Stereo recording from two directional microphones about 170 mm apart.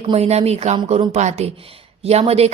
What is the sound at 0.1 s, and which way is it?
Speech, 40° right (ahead or behind).